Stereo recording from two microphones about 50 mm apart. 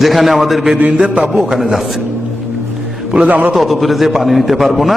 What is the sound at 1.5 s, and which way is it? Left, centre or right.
Speech, centre.